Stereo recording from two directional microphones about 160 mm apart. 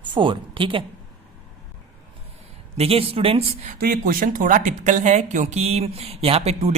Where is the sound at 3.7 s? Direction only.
65° right (ahead or behind).